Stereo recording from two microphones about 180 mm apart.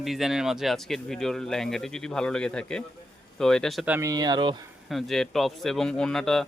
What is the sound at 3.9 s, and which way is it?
Speech, 20° right (ahead or behind).